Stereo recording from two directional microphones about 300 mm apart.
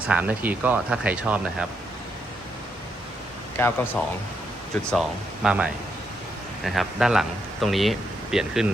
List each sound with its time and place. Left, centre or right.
0.0 s speech: centre
3.6 s speech: centre